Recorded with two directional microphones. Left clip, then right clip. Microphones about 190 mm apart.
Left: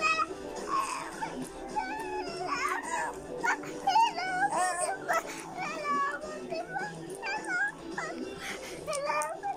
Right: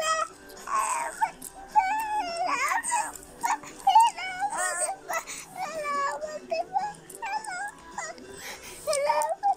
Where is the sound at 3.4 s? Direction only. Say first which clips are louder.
Right 4 dB; 15° right (ahead or behind).